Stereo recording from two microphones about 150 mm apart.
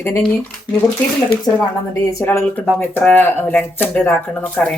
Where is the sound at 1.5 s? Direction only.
20° left (ahead or behind).